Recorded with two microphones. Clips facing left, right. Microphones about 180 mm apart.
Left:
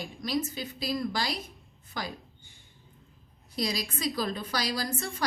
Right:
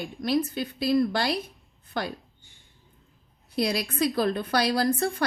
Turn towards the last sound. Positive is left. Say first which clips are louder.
# right 9 dB
turn(degrees=-60)  # may be behind; listen again after turning